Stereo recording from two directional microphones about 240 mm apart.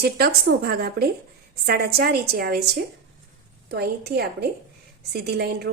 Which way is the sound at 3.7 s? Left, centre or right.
Right.